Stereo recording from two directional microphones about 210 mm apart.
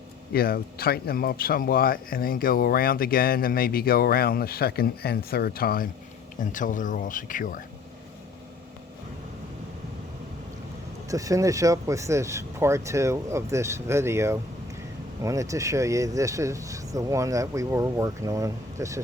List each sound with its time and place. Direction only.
0.3 s speech: 45° left (ahead or behind)
11.1 s speech: 15° right (ahead or behind)